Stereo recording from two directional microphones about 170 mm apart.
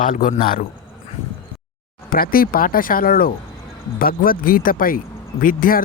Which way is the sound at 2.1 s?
60° left (ahead or behind).